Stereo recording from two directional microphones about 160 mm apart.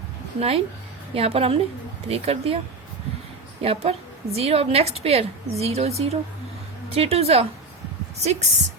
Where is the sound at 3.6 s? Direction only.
40° right (ahead or behind).